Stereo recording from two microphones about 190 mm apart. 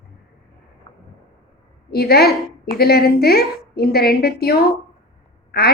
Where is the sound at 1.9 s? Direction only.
55° left (ahead or behind).